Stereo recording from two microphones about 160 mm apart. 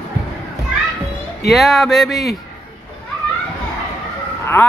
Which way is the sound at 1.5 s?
Centre (ahead or behind).